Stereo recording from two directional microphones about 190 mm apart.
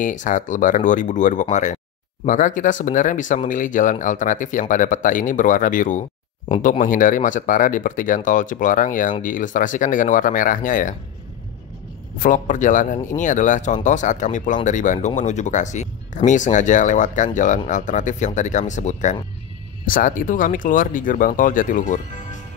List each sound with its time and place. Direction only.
0.0 s speech: 40° left (ahead or behind)
12.2 s speech: 40° left (ahead or behind)